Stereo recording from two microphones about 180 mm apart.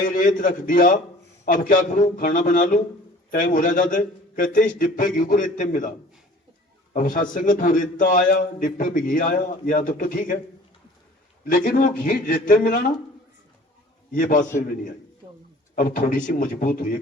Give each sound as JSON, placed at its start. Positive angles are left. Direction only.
{"t": 0.0, "sound": "a man's voice", "side_deg": 45}
{"t": 6.9, "sound": "a man's voice", "side_deg": 50}
{"t": 11.4, "sound": "a man's voice", "side_deg": 50}
{"t": 14.1, "sound": "a man's voice", "side_deg": 45}
{"t": 15.7, "sound": "a man's voice", "side_deg": 50}